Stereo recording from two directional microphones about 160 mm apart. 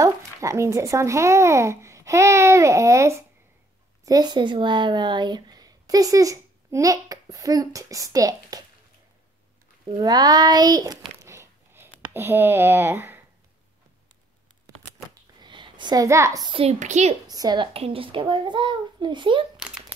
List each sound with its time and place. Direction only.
0.0 s speech: 20° right (ahead or behind)
9.8 s speech: 25° right (ahead or behind)
11.2 s a sound: 15° right (ahead or behind)
14.7 s a sound: 20° right (ahead or behind)
15.4 s a woman's voice: 30° right (ahead or behind)
16.8 s a woman's voice: 45° right (ahead or behind)
17.3 s speech: 25° right (ahead or behind)
17.7 s a child's voice: 35° right (ahead or behind)
19.5 s a sound: 5° right (ahead or behind)